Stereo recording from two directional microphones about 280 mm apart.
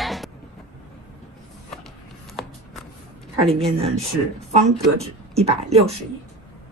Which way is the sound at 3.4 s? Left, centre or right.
Right.